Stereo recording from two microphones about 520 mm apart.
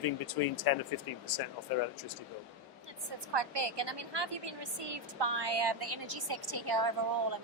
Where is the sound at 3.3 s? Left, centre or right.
Right.